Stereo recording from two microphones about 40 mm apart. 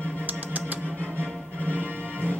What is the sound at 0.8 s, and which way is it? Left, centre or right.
Music, left.